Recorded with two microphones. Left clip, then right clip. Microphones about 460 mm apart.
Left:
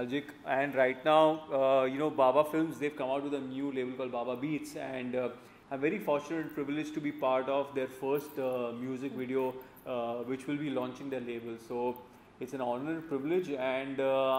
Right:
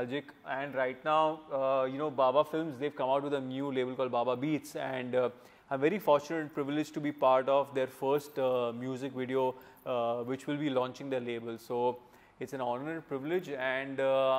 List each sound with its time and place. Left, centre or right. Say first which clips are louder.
0.5 s mantra: left 5 dB; right
3.1 s a man's voice: right 3 dB; right
12.4 s speech: even; right